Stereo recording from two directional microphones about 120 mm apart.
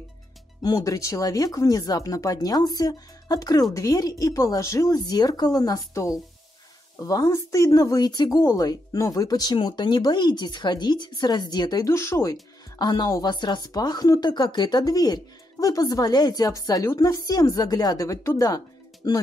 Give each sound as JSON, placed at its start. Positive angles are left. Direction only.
{"t": 0.6, "sound": "speech", "side_deg": 30}